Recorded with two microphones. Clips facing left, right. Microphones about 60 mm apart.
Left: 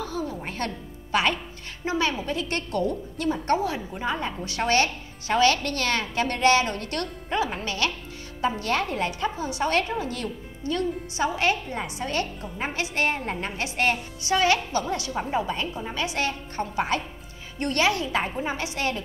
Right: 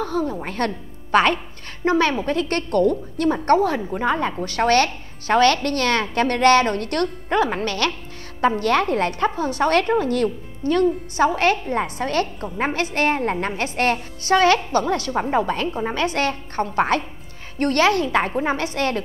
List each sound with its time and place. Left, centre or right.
0.0 s a woman's voice: right